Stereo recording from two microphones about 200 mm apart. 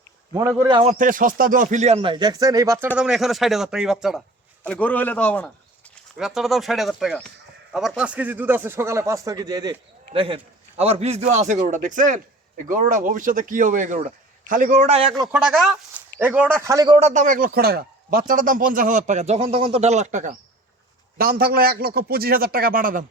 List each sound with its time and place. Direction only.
0.3 s a man's voice: 15° right (ahead or behind)
0.8 s speech: 35° right (ahead or behind); by 2.9 s 15° right (ahead or behind)
3.0 s a man's voice: centre (ahead or behind); by 15.1 s 30° right (ahead or behind)
15.3 s a man's voice: centre (ahead or behind); by 17.0 s 20° right (ahead or behind)
17.0 s speech: 40° right (ahead or behind)
21.2 s a man's voice: 50° right (ahead or behind)